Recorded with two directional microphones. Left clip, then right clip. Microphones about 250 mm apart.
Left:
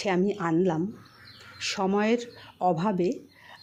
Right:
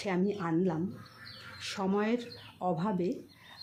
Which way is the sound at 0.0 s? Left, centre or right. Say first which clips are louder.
Left 6 dB; left.